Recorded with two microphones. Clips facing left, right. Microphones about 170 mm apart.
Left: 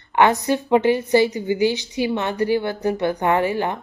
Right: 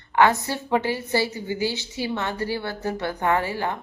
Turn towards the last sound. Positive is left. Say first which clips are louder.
# left 4 dB
turn(degrees=20)  # may be behind; listen again after turning